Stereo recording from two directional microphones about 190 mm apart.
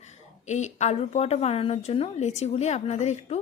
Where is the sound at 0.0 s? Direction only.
35° left (ahead or behind).